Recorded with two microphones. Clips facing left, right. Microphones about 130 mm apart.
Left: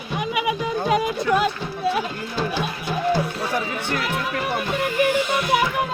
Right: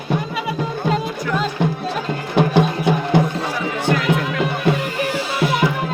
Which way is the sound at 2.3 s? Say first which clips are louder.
Right 10 dB; 65° right (ahead or behind).